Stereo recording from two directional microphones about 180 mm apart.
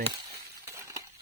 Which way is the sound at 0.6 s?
15° right (ahead or behind).